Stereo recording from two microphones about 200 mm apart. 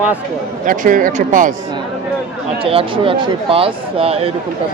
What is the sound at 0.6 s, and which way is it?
Speech, 40° right (ahead or behind).